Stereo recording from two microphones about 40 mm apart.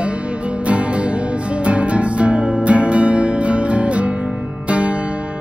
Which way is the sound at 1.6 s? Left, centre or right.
Right.